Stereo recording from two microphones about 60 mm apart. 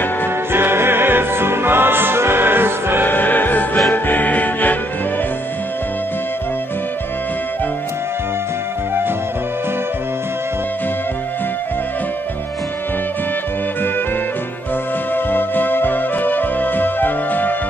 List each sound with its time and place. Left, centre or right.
0.5 s music: right
3.1 s music: left
15.1 s music: left